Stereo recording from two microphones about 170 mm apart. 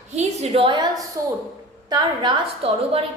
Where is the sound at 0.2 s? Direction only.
35° right (ahead or behind).